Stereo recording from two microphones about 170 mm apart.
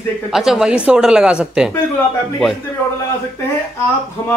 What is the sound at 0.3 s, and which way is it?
Speech, centre (ahead or behind).